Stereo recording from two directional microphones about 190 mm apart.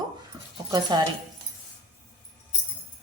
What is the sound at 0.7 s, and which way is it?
Speech, 20° right (ahead or behind).